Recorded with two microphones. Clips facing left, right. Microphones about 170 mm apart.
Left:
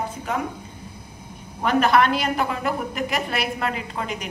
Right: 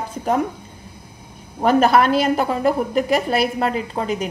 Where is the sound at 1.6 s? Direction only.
40° right (ahead or behind).